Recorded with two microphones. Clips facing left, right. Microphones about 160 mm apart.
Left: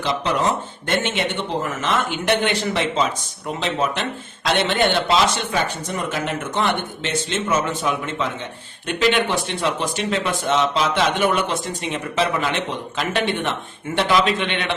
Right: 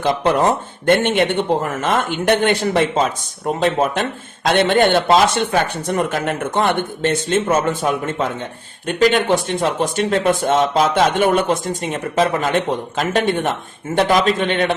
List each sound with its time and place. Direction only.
0.0 s speech: 50° right (ahead or behind)